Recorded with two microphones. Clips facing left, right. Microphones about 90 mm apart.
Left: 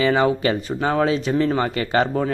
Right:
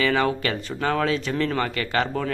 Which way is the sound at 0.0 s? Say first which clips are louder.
Left 4 dB; 20° left (ahead or behind).